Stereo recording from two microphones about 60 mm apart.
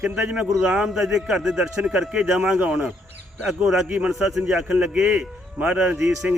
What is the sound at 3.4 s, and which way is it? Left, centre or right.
A man's voice, centre.